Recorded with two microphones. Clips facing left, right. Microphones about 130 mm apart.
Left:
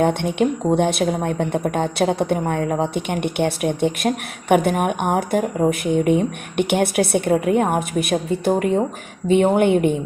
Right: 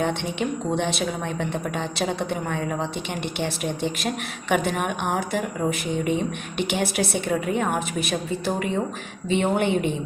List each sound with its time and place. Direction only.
0.0 s speech: 50° left (ahead or behind)